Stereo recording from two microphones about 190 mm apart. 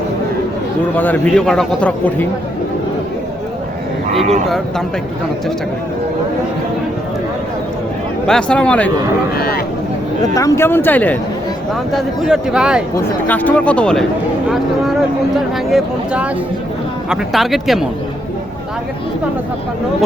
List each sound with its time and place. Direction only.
0.9 s a man's voice: 10° left (ahead or behind)
8.3 s speech: 5° left (ahead or behind)
9.4 s speech: 50° left (ahead or behind)
10.3 s a man's voice: 15° left (ahead or behind); by 12.8 s 5° right (ahead or behind)
13.1 s a man's voice: 10° left (ahead or behind)
15.5 s speech: 5° right (ahead or behind)